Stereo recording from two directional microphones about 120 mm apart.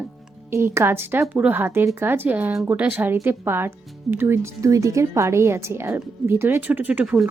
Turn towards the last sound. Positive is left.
turn(degrees=-10)  # may be behind; listen again after turning